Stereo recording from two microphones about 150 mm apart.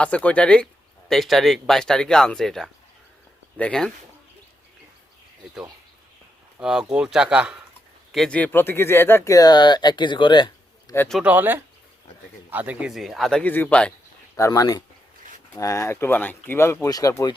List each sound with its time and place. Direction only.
0.0 s speech: 10° left (ahead or behind)
6.6 s speech: 5° right (ahead or behind)
8.1 s speech: 5° left (ahead or behind); by 10.9 s 30° left (ahead or behind)
11.2 s speech: 10° right (ahead or behind)
13.0 s speech: centre (ahead or behind)
14.3 s speech: 20° left (ahead or behind)